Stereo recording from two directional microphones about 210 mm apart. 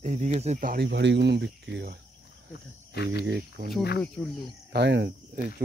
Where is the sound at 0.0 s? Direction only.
35° right (ahead or behind); by 2.0 s 55° right (ahead or behind).